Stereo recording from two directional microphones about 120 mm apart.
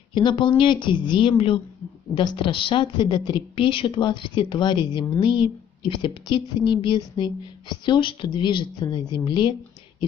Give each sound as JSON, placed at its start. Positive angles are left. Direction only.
{"t": 0.1, "sound": "a woman's voice", "side_deg": 40}